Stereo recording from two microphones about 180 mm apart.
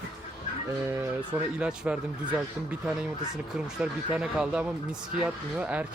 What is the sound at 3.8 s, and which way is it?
Speech, 5° right (ahead or behind).